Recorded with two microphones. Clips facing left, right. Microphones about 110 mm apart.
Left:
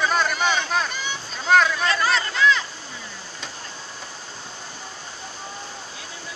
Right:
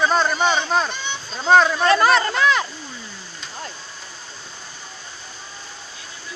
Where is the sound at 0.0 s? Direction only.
30° right (ahead or behind).